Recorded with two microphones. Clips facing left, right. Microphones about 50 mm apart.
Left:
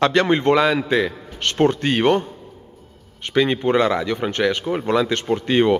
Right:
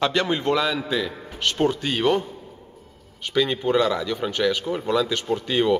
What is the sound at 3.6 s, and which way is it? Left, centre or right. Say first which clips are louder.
Speech: left 3 dB; left.